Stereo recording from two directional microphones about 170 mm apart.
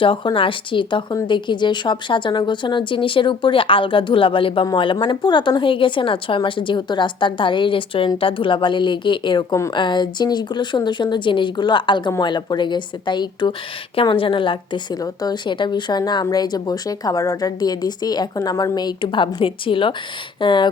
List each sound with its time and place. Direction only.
0.0 s a woman's voice: 30° left (ahead or behind)